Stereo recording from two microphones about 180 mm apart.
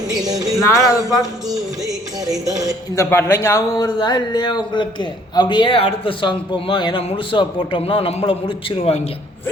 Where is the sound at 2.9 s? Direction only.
15° left (ahead or behind); by 9.2 s 35° left (ahead or behind).